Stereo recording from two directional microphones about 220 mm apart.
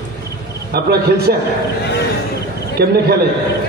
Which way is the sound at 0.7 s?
45° right (ahead or behind).